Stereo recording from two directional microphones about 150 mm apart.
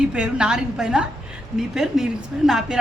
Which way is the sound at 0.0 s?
5° right (ahead or behind).